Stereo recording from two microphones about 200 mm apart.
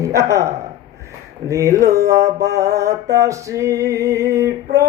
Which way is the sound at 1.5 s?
15° right (ahead or behind).